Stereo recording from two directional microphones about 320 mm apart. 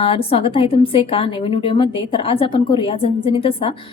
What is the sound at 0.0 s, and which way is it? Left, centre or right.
A woman's voice, centre.